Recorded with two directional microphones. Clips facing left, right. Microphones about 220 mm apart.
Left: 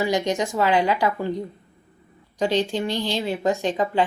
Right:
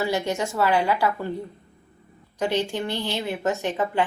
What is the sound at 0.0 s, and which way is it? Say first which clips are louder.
Speech: left 2 dB; 15° left (ahead or behind).